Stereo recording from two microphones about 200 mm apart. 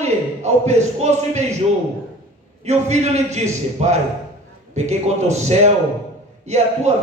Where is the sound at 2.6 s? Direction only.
35° right (ahead or behind).